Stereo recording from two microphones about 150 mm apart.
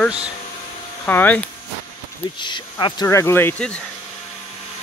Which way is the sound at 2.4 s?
30° left (ahead or behind).